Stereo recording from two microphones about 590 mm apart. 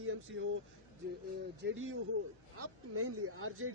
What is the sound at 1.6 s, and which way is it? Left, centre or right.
Speech, centre.